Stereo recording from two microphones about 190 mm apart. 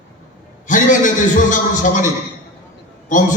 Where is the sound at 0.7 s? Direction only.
40° left (ahead or behind).